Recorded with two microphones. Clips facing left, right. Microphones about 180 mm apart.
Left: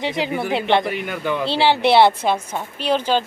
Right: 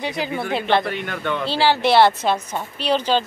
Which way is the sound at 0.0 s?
20° left (ahead or behind).